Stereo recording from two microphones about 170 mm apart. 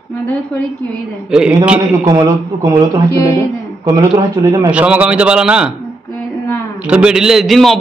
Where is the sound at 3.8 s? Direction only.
20° right (ahead or behind).